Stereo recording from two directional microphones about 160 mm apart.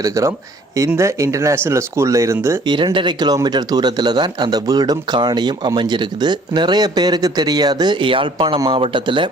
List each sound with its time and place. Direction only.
0.0 s speech: 20° right (ahead or behind)
2.6 s speech: 30° right (ahead or behind)